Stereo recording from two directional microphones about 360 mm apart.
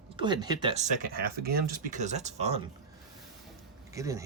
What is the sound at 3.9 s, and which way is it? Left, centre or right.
Speech, centre.